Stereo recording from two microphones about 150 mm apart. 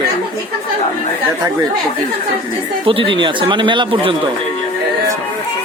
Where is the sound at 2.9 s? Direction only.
35° right (ahead or behind).